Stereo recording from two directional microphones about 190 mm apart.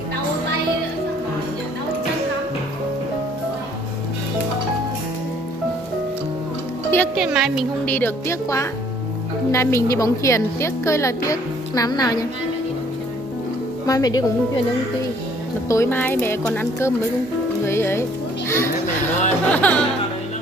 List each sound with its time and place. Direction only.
7.2 s a woman's voice: centre (ahead or behind); by 12.3 s 20° left (ahead or behind)
13.8 s speech: 20° left (ahead or behind)
15.7 s a woman's voice: 10° left (ahead or behind)
18.5 s music: 15° left (ahead or behind)